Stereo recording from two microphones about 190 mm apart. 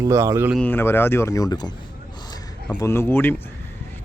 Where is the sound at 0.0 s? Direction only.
15° right (ahead or behind).